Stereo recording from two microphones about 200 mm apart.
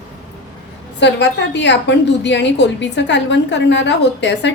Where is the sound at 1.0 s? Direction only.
60° left (ahead or behind).